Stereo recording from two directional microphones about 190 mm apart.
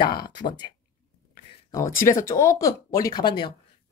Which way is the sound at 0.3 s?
25° left (ahead or behind).